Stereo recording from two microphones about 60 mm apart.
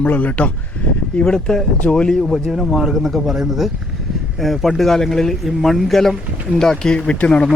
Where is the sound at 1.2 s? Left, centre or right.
Centre.